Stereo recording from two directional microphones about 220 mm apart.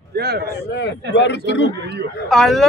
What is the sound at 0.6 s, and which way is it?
Speech, 50° left (ahead or behind).